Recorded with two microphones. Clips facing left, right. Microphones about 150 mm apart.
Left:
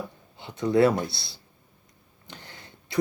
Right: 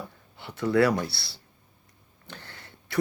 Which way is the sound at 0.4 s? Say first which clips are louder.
Left 2 dB; 20° left (ahead or behind).